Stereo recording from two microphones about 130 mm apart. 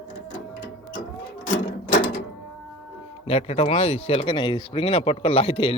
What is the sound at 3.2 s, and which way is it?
Speech, 50° left (ahead or behind).